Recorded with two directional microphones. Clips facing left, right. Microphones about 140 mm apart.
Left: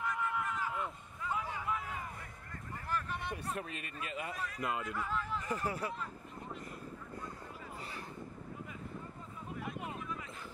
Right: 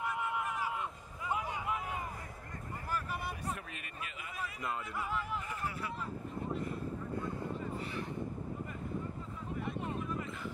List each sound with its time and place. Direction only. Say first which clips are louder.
0.0 s a sound: right 1 dB; 15° right (ahead or behind)
2.9 s vehicle: left 1 dB; 5° right (ahead or behind)
3.5 s a man's voice: left 4 dB; 35° left (ahead or behind)
4.6 s speech: left 2 dB; 10° left (ahead or behind)
4.8 s speech: even; 10° right (ahead or behind)
5.5 s a man's voice: left 3 dB; 40° left (ahead or behind)
9.6 s vehicle: right 3 dB; 10° left (ahead or behind)